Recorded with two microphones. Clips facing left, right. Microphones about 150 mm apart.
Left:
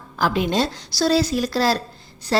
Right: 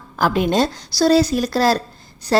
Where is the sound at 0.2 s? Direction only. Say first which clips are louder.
Right 3 dB; 50° right (ahead or behind).